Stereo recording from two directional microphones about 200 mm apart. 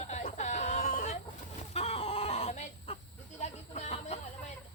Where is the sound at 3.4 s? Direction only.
35° left (ahead or behind).